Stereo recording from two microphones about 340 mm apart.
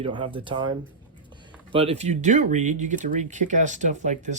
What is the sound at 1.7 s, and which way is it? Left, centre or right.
Speech, centre.